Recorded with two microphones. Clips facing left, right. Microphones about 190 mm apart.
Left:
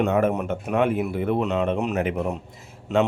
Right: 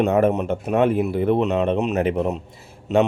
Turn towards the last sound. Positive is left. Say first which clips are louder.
# right 3 dB
turn(degrees=-20)  # may be behind; listen again after turning